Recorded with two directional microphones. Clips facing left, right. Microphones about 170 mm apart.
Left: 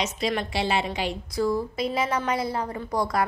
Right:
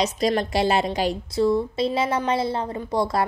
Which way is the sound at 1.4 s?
25° right (ahead or behind).